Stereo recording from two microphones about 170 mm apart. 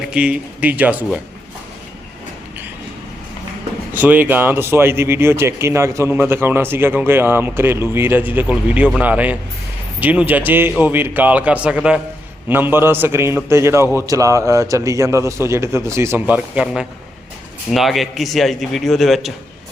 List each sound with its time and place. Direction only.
0.1 s speech: 5° right (ahead or behind)
3.9 s speech: 10° right (ahead or behind)